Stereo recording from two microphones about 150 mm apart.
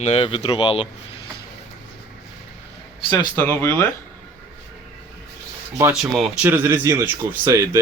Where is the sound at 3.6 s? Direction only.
15° left (ahead or behind).